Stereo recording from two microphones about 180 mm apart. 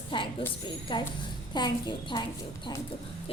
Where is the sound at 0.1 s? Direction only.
30° left (ahead or behind).